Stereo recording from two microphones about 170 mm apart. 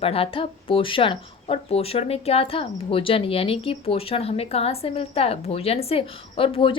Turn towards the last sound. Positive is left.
turn(degrees=30)  # may be behind; listen again after turning